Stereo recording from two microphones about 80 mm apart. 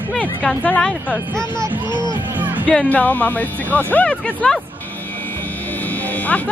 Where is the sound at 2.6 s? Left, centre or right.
Centre.